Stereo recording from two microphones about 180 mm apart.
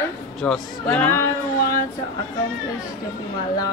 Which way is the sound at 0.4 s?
5° left (ahead or behind).